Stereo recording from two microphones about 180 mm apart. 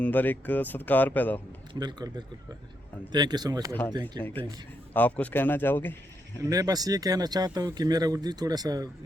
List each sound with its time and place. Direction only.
0.0 s speech: 10° left (ahead or behind)
1.8 s speech: 25° right (ahead or behind)
4.2 s speech: 10° left (ahead or behind)
6.4 s speech: 20° right (ahead or behind)